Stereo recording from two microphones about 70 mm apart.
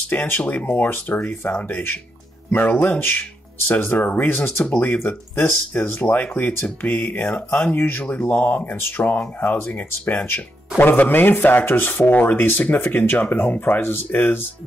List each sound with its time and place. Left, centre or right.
0.1 s speech: left
0.4 s speech: centre